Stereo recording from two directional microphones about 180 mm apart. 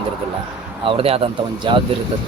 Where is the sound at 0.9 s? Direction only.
35° right (ahead or behind).